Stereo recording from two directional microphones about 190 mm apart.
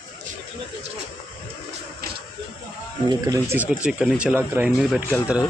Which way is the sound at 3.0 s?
20° right (ahead or behind).